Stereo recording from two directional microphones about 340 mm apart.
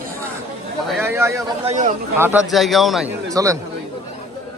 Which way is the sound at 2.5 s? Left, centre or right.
Centre.